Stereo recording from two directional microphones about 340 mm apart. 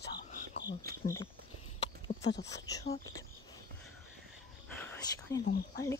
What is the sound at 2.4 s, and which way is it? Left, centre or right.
Speech, centre.